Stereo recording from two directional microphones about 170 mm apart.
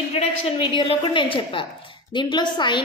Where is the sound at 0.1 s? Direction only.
35° left (ahead or behind).